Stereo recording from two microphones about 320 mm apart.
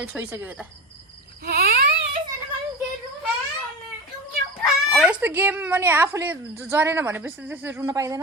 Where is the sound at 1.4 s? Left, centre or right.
Right.